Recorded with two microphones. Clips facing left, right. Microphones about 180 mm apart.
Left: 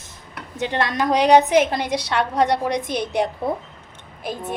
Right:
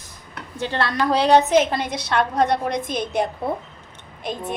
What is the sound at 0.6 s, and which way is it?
A woman's voice, 15° left (ahead or behind).